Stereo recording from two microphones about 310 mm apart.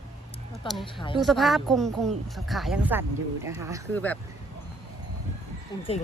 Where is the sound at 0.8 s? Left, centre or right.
Centre.